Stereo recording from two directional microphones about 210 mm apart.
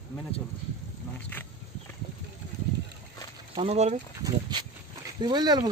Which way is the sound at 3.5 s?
30° right (ahead or behind).